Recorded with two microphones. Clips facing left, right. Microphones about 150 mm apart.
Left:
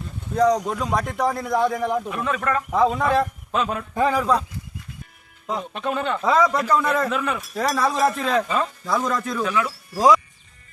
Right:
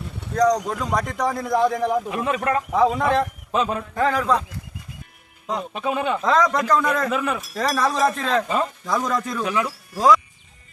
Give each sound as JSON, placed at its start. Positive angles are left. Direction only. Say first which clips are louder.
{"t": 0.3, "sound": "speech", "louder": "even", "side_deg": 5}
{"t": 2.0, "sound": "speech", "louder": "right 2 dB", "side_deg": -20}
{"t": 2.7, "sound": "speech", "louder": "even", "side_deg": 0}
{"t": 3.9, "sound": "a man's voice", "louder": "left 1 dB", "side_deg": 10}
{"t": 5.5, "sound": "speech", "louder": "right 1 dB", "side_deg": 0}
{"t": 6.2, "sound": "speech", "louder": "left 1 dB", "side_deg": 5}
{"t": 7.5, "sound": "speech", "louder": "left 1 dB", "side_deg": 5}
{"t": 9.4, "sound": "speech", "louder": "even", "side_deg": -15}
{"t": 9.9, "sound": "speech", "louder": "even", "side_deg": 5}